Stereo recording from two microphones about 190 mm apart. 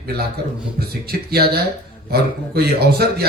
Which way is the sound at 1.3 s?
55° right (ahead or behind).